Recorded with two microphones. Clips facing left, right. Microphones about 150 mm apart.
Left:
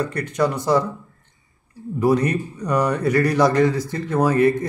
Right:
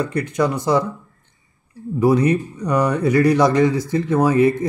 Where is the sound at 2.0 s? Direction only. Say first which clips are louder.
Right 3 dB; 15° right (ahead or behind).